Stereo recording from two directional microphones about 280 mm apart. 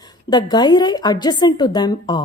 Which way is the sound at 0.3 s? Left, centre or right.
Centre.